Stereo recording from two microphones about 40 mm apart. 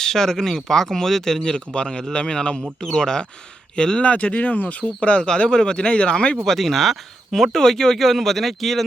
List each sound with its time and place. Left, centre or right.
0.0 s speech: centre
1.4 s speech: left
4.0 s speech: left
6.4 s speech: centre
7.5 s speech: centre